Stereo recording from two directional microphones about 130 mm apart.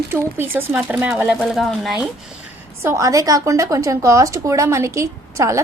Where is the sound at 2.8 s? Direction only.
25° right (ahead or behind).